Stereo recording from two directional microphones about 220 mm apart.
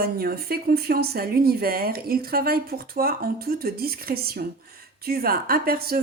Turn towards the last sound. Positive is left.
turn(degrees=-40)  # may be behind; listen again after turning